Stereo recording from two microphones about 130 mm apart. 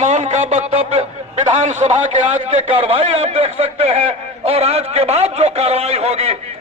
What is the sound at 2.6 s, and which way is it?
A man's voice, 50° right (ahead or behind).